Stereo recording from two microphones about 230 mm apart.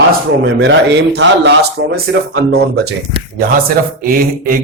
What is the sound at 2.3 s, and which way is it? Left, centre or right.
Speech, right.